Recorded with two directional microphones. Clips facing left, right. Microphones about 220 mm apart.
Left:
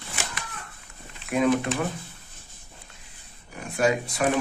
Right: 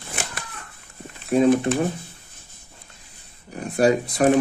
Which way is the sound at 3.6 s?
35° right (ahead or behind).